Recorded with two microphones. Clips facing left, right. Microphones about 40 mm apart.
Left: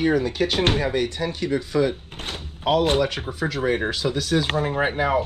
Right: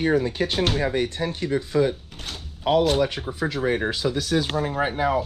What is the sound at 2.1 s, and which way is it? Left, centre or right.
Door, left.